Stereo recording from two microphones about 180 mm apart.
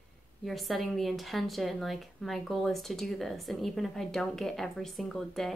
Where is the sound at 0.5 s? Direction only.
Centre (ahead or behind).